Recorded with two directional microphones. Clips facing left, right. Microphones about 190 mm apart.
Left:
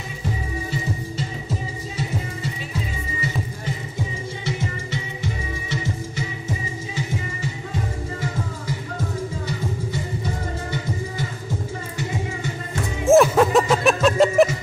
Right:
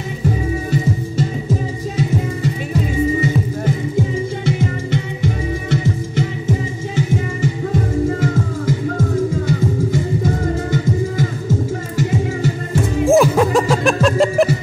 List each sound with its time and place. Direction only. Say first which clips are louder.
4.5 s music: right 7 dB; 55° right (ahead or behind)
13.0 s music: right 1 dB; centre (ahead or behind)